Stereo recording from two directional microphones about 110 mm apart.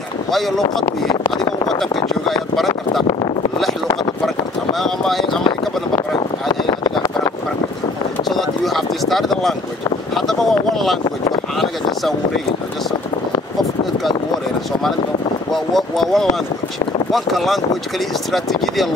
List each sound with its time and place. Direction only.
0.3 s speech: centre (ahead or behind)
4.7 s speech: centre (ahead or behind)
6.1 s a sound: 45° left (ahead or behind)
8.2 s vehicle: centre (ahead or behind)
10.1 s speech: centre (ahead or behind)
15.5 s speech: centre (ahead or behind)